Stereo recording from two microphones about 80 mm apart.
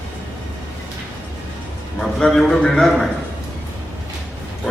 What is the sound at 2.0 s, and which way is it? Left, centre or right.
A man's voice, centre.